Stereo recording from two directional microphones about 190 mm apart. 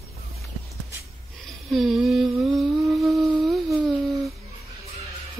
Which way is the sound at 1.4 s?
Centre (ahead or behind).